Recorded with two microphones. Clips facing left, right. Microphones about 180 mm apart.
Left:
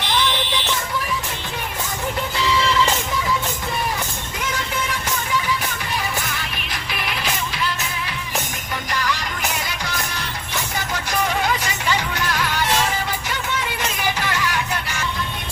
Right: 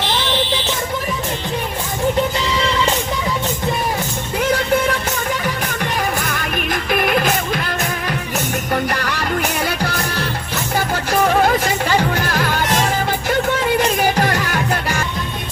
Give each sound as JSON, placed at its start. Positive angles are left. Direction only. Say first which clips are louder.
{"t": 6.0, "sound": "music", "louder": "right 6 dB", "side_deg": -50}